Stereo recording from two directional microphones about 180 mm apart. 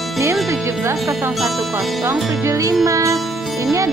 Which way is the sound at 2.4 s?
15° right (ahead or behind).